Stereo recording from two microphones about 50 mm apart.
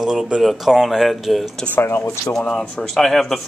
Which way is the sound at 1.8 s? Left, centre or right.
Left.